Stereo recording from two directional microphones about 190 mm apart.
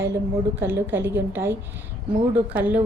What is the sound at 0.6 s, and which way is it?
A woman's voice, 10° right (ahead or behind).